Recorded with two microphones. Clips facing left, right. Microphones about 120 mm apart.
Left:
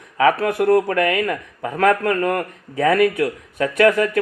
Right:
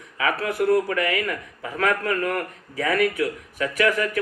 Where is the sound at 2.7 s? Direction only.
30° left (ahead or behind).